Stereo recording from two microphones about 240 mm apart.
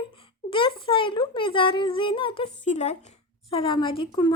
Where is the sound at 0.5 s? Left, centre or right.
Left.